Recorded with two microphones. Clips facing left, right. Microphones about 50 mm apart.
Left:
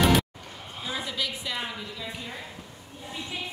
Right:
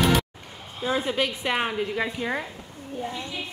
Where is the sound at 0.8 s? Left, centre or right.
Right.